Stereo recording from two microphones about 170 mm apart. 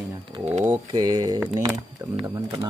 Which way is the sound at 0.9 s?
25° right (ahead or behind).